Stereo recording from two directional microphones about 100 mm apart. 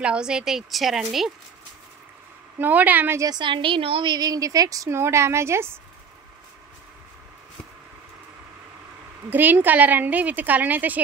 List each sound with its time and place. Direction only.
0.0 s a woman's voice: 10° right (ahead or behind)
2.6 s a woman's voice: 15° right (ahead or behind)
3.2 s a woman's voice: 45° right (ahead or behind); by 4.1 s 60° right (ahead or behind)
4.1 s a woman's voice: 40° right (ahead or behind)
9.3 s a woman's voice: 20° right (ahead or behind)